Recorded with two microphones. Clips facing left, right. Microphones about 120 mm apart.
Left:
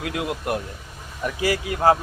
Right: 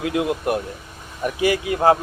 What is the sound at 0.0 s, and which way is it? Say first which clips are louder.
Speech: right 5 dB; 25° right (ahead or behind).